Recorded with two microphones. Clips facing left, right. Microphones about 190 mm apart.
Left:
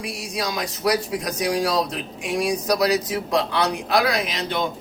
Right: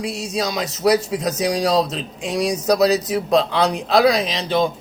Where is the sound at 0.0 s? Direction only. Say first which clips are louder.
Right 5 dB; 25° right (ahead or behind).